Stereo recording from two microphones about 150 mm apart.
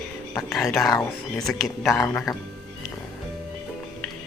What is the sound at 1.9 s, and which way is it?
Speech, 20° left (ahead or behind).